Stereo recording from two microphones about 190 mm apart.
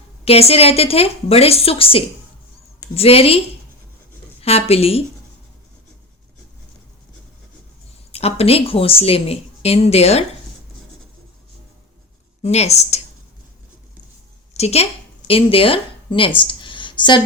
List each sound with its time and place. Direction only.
0.3 s a woman's voice: 30° left (ahead or behind)
8.1 s a woman's voice: 30° left (ahead or behind)
12.4 s a woman's voice: 35° left (ahead or behind)
14.5 s a woman's voice: 35° left (ahead or behind)